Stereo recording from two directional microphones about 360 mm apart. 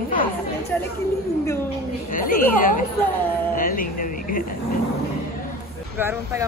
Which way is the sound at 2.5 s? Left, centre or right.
Left.